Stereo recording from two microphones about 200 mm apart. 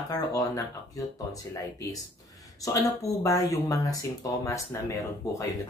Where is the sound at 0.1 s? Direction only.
15° left (ahead or behind).